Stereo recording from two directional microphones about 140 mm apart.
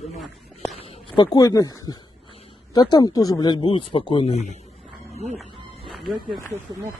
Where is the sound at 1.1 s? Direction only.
25° left (ahead or behind).